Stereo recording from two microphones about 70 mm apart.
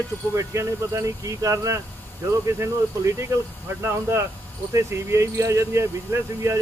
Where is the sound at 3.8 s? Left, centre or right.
Right.